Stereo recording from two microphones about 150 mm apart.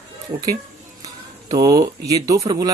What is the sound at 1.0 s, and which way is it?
Speech, 25° right (ahead or behind).